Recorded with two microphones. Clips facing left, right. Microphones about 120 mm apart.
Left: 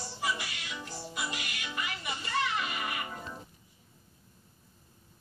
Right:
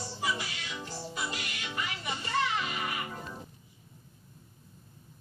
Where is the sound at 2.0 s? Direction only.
30° right (ahead or behind).